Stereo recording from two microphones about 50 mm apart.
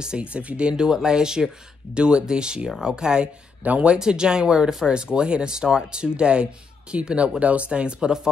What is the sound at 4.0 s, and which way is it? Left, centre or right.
Speech, centre.